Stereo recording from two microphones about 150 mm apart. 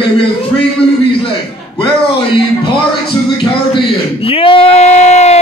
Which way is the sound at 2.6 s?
35° left (ahead or behind).